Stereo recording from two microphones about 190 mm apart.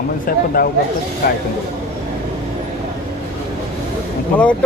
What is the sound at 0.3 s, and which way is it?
A man's voice, 50° left (ahead or behind).